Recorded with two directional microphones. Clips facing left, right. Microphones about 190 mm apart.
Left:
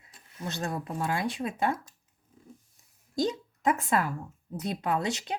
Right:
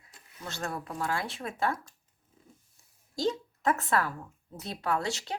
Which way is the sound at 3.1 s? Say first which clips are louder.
Left 1 dB; 15° left (ahead or behind).